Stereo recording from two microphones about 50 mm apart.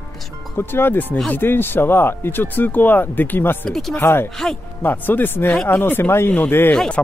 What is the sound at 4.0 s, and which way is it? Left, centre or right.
Speech, left.